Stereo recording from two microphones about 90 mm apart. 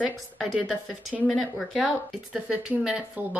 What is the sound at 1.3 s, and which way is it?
Speech, centre (ahead or behind).